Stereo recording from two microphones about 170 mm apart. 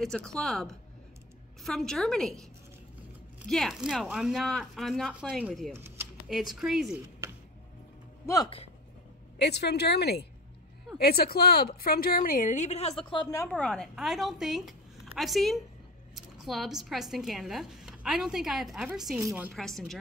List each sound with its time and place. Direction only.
0.0 s speech: 5° left (ahead or behind)
3.4 s speech: centre (ahead or behind)
9.4 s a woman's voice: 80° left
11.0 s a woman's voice: 65° left (ahead or behind); by 13.5 s 25° left (ahead or behind)
13.5 s a woman's voice: 5° left (ahead or behind); by 19.5 s 10° right (ahead or behind)
19.5 s speech: centre (ahead or behind)